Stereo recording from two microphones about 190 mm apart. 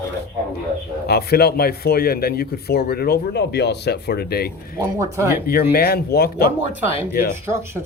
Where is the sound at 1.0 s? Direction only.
55° left (ahead or behind).